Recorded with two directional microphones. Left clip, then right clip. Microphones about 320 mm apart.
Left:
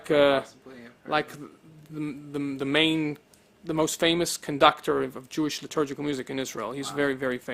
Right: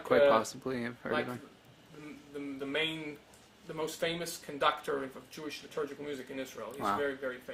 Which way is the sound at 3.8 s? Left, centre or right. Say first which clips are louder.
Left 11 dB; left.